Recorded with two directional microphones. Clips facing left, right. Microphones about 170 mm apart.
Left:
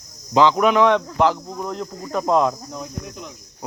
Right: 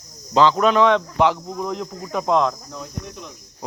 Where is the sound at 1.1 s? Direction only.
Centre (ahead or behind).